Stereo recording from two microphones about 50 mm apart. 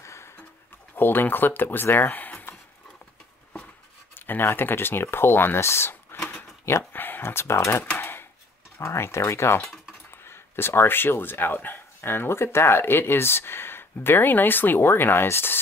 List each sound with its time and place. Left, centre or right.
0.0 s a sound: left
0.9 s speech: left
4.1 s speech: left
6.9 s speech: left
8.0 s a sound: left
8.8 s speech: left